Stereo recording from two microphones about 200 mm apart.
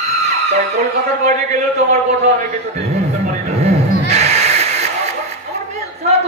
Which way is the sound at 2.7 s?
35° right (ahead or behind).